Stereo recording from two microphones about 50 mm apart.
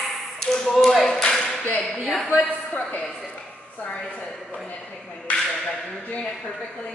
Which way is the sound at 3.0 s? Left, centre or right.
Centre.